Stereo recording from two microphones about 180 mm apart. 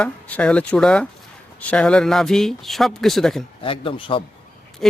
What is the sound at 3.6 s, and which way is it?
Speech, 30° left (ahead or behind).